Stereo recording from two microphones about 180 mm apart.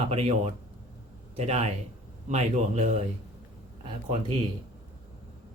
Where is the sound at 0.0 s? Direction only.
35° right (ahead or behind).